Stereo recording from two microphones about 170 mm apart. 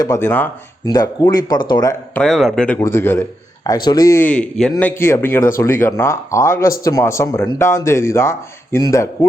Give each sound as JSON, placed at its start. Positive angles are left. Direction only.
{"t": 0.0, "sound": "speech", "side_deg": 15}
{"t": 2.1, "sound": "a man's voice", "side_deg": 5}